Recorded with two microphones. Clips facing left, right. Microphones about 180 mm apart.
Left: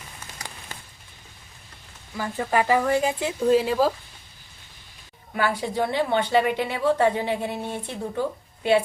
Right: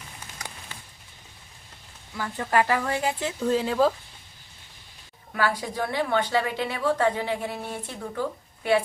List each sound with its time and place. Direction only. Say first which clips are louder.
0.7 s a sound: left 3 dB; 40° left (ahead or behind)
2.1 s speech: left 1 dB; 15° left (ahead or behind)
5.3 s a woman's voice: left 2 dB; 20° left (ahead or behind)